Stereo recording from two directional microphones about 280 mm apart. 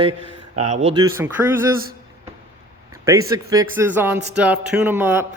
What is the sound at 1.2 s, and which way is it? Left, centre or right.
Speech, centre.